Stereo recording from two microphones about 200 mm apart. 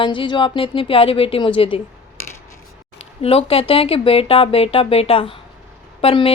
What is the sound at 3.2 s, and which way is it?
A woman's voice, 30° left (ahead or behind).